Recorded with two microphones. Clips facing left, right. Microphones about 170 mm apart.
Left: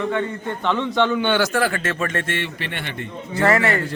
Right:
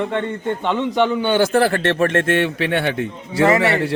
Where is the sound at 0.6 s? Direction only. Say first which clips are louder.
Right 1 dB; 15° right (ahead or behind).